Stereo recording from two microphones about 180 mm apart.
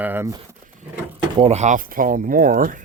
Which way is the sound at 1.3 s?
35° right (ahead or behind).